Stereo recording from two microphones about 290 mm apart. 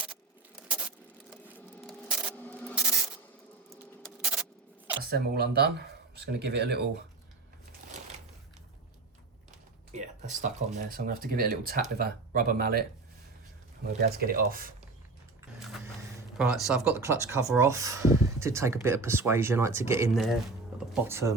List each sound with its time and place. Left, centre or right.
0.0 s a sound: centre
1.5 s rub: centre
4.0 s a sound: centre
5.0 s speech: right
9.9 s speech: right
13.8 s speech: right
16.4 s speech: centre